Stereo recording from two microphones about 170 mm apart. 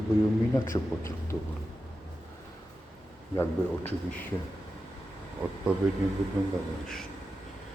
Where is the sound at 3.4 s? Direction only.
10° left (ahead or behind).